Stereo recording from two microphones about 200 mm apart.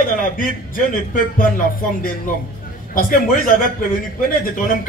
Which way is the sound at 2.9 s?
45° left (ahead or behind).